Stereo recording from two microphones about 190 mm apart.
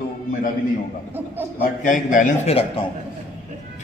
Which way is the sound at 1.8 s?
45° left (ahead or behind).